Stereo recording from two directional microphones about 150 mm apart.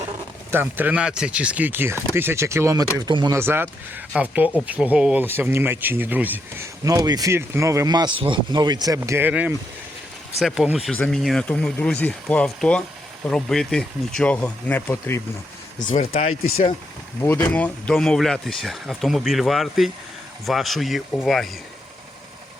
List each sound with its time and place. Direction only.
0.5 s speech: 15° right (ahead or behind)
3.1 s speech: 30° right (ahead or behind)
3.3 s speech: 15° right (ahead or behind)
6.8 s speech: 25° right (ahead or behind)
9.0 s speech: 15° right (ahead or behind); by 15.2 s 15° left (ahead or behind)
16.1 s speech: 45° left (ahead or behind)
17.2 s speech: 15° left (ahead or behind)